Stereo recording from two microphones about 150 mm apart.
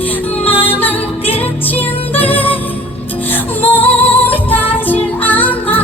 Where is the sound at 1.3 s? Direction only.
40° left (ahead or behind).